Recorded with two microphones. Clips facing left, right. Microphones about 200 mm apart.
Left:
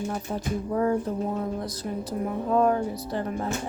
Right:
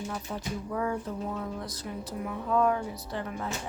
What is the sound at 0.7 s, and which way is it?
Speech, 40° left (ahead or behind).